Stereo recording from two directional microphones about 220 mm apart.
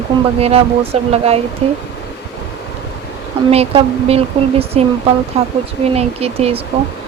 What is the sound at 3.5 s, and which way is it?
Speech, 25° right (ahead or behind).